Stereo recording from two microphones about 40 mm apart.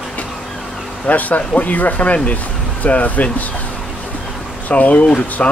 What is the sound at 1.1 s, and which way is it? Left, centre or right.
Speech, left.